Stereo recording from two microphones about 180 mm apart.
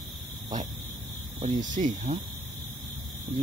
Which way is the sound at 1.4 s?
45° right (ahead or behind).